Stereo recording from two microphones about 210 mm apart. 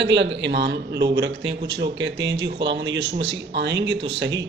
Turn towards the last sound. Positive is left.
turn(degrees=-55)  # may be behind; listen again after turning